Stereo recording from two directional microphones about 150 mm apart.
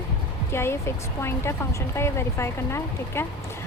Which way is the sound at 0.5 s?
15° left (ahead or behind).